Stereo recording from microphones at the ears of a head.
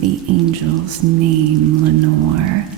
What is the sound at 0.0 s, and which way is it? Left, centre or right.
Music, right.